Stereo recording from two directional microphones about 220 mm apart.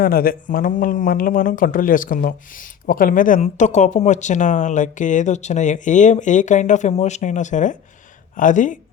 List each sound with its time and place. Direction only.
0.0 s speech: 40° left (ahead or behind)